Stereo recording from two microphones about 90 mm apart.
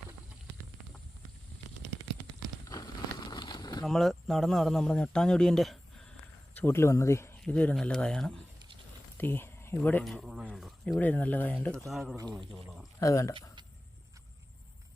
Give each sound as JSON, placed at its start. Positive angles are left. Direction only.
{"t": 2.6, "sound": "a sound", "side_deg": 50}
{"t": 3.8, "sound": "speech", "side_deg": 5}
{"t": 6.6, "sound": "speech", "side_deg": 25}
{"t": 7.4, "sound": "speech", "side_deg": 15}
{"t": 9.1, "sound": "speech", "side_deg": 25}
{"t": 10.0, "sound": "speech", "side_deg": -5}
{"t": 11.0, "sound": "speech", "side_deg": 20}
{"t": 11.9, "sound": "speech", "side_deg": -5}
{"t": 13.0, "sound": "speech", "side_deg": 35}